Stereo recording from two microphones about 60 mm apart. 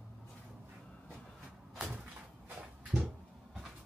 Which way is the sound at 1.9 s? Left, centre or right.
Right.